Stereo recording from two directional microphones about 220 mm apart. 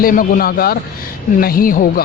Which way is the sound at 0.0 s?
40° left (ahead or behind).